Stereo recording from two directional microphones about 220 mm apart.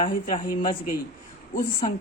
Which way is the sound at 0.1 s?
40° left (ahead or behind).